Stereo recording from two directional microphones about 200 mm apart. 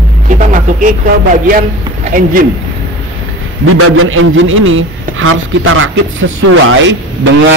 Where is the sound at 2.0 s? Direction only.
45° right (ahead or behind).